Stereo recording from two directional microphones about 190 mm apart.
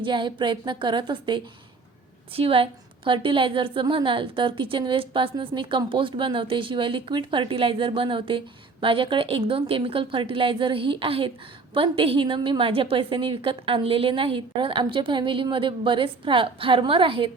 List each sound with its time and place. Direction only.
0.0 s a woman's voice: 25° right (ahead or behind)